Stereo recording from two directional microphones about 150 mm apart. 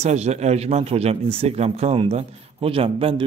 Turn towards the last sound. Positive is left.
turn(degrees=-35)  # may be behind; listen again after turning